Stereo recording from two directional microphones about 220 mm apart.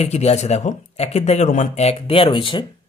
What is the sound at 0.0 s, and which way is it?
Speech, 30° left (ahead or behind).